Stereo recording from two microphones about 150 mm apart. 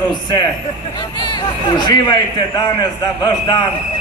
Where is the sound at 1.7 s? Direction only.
30° left (ahead or behind).